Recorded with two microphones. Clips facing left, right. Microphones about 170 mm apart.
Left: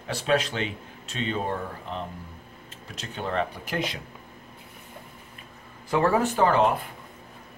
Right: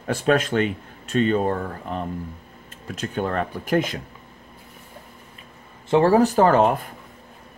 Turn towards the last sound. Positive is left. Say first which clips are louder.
# right 4 dB
turn(degrees=-45)  # may be behind; listen again after turning